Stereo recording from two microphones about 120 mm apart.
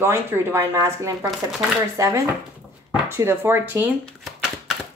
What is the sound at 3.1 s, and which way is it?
Speech, 20° right (ahead or behind).